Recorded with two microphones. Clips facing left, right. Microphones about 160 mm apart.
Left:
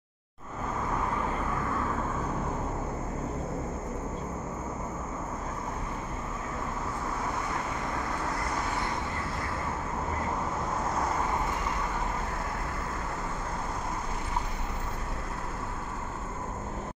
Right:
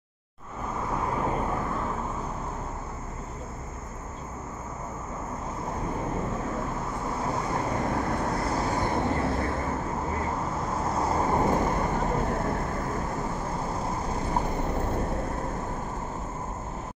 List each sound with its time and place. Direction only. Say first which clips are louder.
8.5 s vehicle: right 5 dB; 35° right (ahead or behind); by 9.5 s 55° right (ahead or behind)
11.0 s vehicle: right 5 dB; 30° right (ahead or behind)
11.3 s vehicle: right 7 dB; 45° right (ahead or behind)